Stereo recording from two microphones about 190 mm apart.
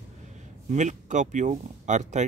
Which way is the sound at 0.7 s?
40° right (ahead or behind).